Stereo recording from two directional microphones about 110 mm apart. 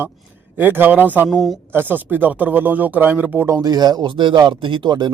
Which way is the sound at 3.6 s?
35° right (ahead or behind).